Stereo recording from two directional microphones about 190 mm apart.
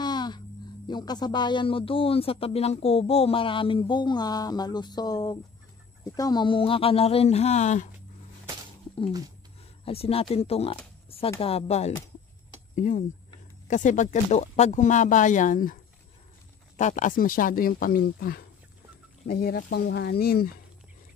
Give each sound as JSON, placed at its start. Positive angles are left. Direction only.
{"t": 0.0, "sound": "music", "side_deg": 20}
{"t": 0.8, "sound": "speech", "side_deg": 20}
{"t": 9.8, "sound": "speech", "side_deg": 30}